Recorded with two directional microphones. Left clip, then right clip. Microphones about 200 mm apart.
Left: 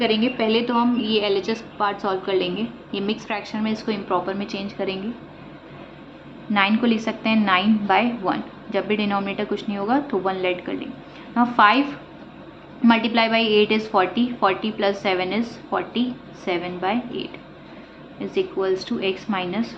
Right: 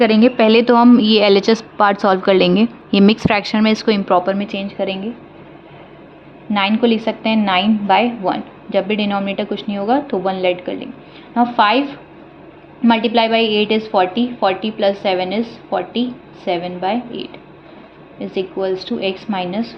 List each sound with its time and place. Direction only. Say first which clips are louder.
0.0 s a woman's voice: right 9 dB; 60° right (ahead or behind); by 4.9 s 30° right (ahead or behind)
6.5 s a woman's voice: right 4 dB; 30° right (ahead or behind)
12.8 s a woman's voice: right 4 dB; 25° right (ahead or behind)